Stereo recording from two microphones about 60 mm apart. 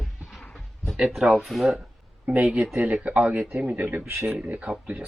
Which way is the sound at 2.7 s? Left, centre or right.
Right.